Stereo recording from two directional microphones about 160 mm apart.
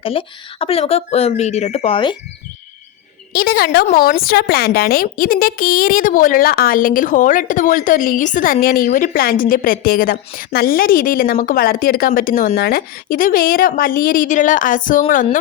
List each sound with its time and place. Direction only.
0.0 s speech: 35° left (ahead or behind)
3.3 s a woman's voice: 70° left (ahead or behind); by 8.5 s 55° left (ahead or behind)
8.6 s a woman's voice: 65° left (ahead or behind)